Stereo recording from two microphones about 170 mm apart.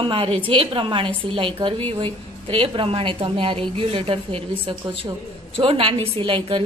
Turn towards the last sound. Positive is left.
turn(degrees=-30)  # may be behind; listen again after turning